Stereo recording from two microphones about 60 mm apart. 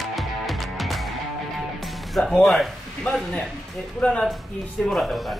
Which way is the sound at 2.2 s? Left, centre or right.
Centre.